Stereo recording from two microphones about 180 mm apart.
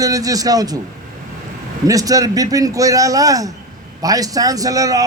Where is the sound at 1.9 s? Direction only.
20° right (ahead or behind).